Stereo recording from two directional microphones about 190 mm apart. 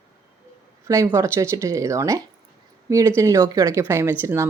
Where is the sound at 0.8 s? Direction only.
15° right (ahead or behind).